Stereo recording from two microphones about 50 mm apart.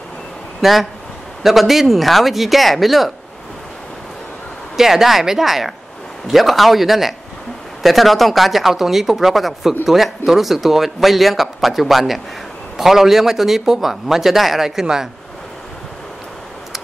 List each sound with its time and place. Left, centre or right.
0.6 s a man's voice: centre
4.7 s a man's voice: centre